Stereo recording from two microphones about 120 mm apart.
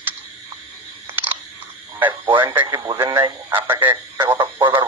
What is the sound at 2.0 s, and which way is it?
Radio, 15° right (ahead or behind).